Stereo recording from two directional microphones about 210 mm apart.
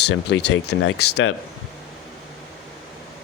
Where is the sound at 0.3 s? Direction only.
55° left (ahead or behind).